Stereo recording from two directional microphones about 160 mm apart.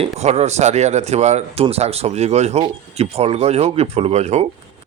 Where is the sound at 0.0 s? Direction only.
40° right (ahead or behind).